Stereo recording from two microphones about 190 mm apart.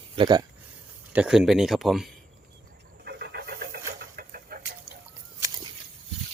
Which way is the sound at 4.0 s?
50° right (ahead or behind).